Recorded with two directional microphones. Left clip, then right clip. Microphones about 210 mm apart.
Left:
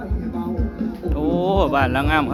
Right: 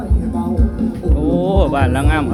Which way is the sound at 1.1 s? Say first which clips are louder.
Right 2 dB; 20° left (ahead or behind).